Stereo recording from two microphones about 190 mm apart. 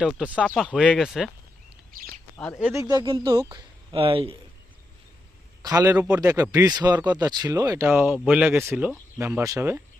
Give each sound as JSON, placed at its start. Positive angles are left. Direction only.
{"t": 0.0, "sound": "speech", "side_deg": -5}
{"t": 2.0, "sound": "bird", "side_deg": 15}
{"t": 2.7, "sound": "speech", "side_deg": -20}
{"t": 5.6, "sound": "speech", "side_deg": -15}